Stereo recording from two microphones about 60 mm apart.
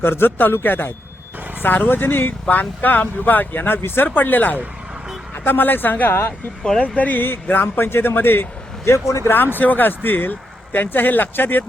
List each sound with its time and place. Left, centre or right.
0.0 s speech: left
6.6 s speech: centre
6.8 s speech: left
8.8 s speech: left
9.3 s speech: left